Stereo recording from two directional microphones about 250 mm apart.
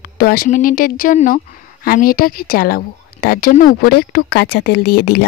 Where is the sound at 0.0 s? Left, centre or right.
Left.